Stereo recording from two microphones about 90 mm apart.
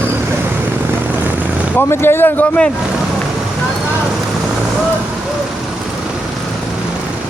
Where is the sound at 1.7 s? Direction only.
25° left (ahead or behind).